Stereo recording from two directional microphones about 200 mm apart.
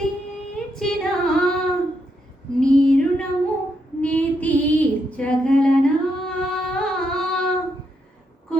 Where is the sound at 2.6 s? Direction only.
5° left (ahead or behind).